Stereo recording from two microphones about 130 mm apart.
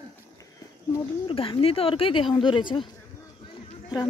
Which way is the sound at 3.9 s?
30° left (ahead or behind).